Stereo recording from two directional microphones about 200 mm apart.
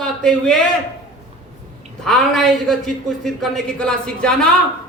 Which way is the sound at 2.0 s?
Centre (ahead or behind).